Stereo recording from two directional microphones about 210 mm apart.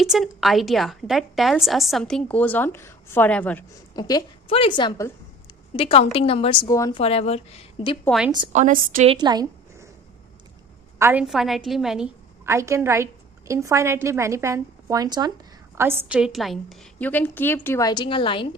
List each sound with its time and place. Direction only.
0.0 s a woman's voice: centre (ahead or behind)
3.9 s a woman's voice: 20° left (ahead or behind)
7.0 s a woman's voice: 30° left (ahead or behind)
8.5 s a woman's voice: 40° right (ahead or behind)
9.0 s a woman's voice: 20° right (ahead or behind)
10.9 s a woman's voice: 10° right (ahead or behind); by 18.4 s 25° left (ahead or behind)